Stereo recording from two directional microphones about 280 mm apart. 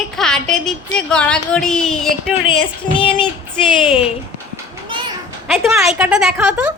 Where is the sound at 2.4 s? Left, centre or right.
Centre.